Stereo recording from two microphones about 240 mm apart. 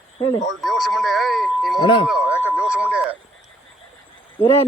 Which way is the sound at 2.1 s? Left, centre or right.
Centre.